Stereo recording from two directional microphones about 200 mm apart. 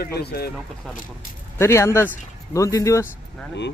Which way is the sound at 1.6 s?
15° left (ahead or behind).